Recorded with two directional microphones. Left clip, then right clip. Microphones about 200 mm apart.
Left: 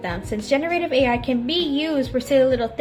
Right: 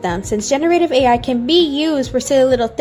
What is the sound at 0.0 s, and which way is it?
Speech, 50° right (ahead or behind).